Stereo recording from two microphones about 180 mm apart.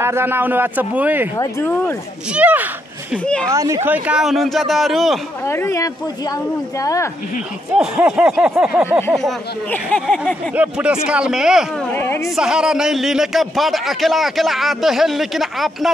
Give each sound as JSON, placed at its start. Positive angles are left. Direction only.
{"t": 0.0, "sound": "a man's voice", "side_deg": -15}
{"t": 1.3, "sound": "speech", "side_deg": 15}
{"t": 2.3, "sound": "a man's voice", "side_deg": -10}
{"t": 5.4, "sound": "speech", "side_deg": 15}
{"t": 7.7, "sound": "a man's voice", "side_deg": -5}
{"t": 9.1, "sound": "a man's voice", "side_deg": 5}
{"t": 11.9, "sound": "speech", "side_deg": 10}
{"t": 12.4, "sound": "a man's voice", "side_deg": -5}